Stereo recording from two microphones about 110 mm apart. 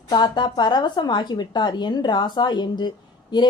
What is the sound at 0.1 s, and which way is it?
A woman's voice, 40° left (ahead or behind).